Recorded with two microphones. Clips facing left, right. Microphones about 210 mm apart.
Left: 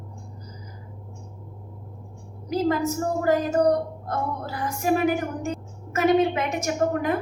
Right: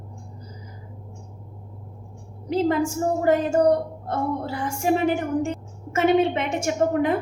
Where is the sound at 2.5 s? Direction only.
30° right (ahead or behind).